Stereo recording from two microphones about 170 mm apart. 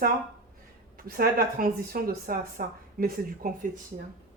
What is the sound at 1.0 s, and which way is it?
Speech, 60° right (ahead or behind).